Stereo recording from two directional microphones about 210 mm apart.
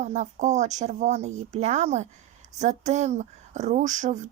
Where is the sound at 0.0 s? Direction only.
35° right (ahead or behind).